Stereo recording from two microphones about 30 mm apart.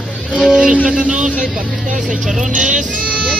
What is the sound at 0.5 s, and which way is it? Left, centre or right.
Music, right.